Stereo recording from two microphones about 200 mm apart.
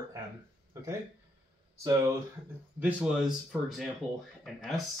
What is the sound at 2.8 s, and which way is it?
Speech, 10° right (ahead or behind).